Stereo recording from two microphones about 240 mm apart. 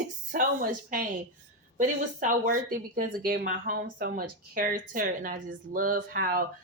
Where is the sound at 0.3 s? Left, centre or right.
Right.